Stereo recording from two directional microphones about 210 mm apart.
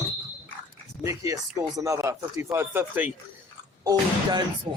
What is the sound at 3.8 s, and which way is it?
Speech, 20° right (ahead or behind).